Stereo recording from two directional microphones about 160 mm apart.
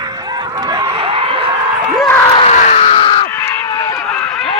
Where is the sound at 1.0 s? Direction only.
35° right (ahead or behind).